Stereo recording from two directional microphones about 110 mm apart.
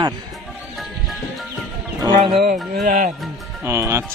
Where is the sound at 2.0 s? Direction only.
40° right (ahead or behind).